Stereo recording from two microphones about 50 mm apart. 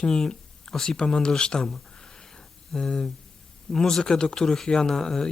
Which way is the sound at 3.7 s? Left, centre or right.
Centre.